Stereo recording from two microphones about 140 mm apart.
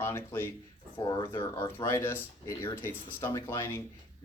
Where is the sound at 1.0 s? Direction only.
30° left (ahead or behind).